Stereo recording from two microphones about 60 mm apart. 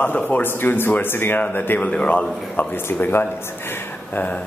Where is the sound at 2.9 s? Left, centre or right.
Left.